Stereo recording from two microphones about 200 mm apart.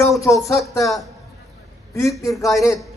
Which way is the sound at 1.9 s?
15° left (ahead or behind).